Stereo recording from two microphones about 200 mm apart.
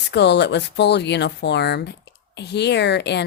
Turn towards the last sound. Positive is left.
turn(degrees=60)  # may be behind; listen again after turning